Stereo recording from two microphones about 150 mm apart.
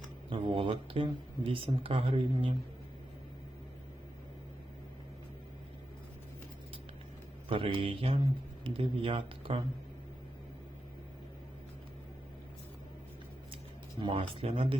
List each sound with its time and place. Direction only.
0.3 s speech: 35° right (ahead or behind)
7.4 s speech: 35° right (ahead or behind)
14.0 s speech: 35° right (ahead or behind)